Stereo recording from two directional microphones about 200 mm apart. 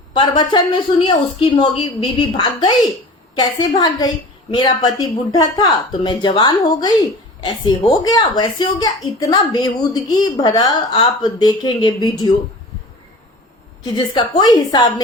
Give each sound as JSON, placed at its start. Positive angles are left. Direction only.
{"t": 0.1, "sound": "a woman's voice", "side_deg": 20}
{"t": 13.9, "sound": "a woman's voice", "side_deg": 20}